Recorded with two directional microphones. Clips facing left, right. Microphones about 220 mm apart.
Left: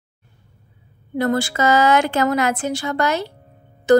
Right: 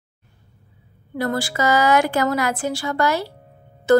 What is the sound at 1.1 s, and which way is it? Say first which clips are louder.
A woman's voice: left 3 dB; 25° left (ahead or behind).